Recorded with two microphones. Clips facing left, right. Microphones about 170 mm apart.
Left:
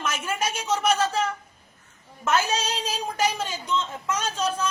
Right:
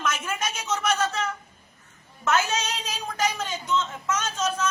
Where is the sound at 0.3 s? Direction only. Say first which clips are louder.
Left 3 dB; 30° left (ahead or behind).